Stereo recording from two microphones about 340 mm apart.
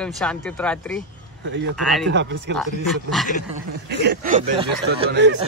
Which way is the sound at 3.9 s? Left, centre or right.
Right.